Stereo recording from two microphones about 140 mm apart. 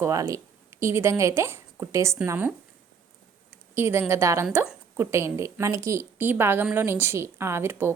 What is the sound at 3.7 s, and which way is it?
A woman's voice, 15° right (ahead or behind).